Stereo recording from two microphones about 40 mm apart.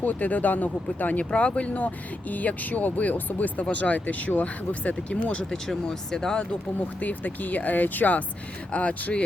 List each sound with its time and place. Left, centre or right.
0.0 s speech: left
1.2 s speech: left
2.3 s speech: left
5.5 s speech: centre
7.0 s speech: left
8.7 s speech: left